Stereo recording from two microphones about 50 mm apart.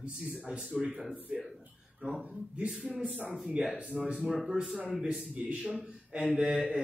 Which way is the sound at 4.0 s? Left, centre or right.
Right.